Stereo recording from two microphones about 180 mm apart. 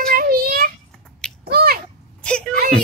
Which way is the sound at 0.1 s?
55° right (ahead or behind).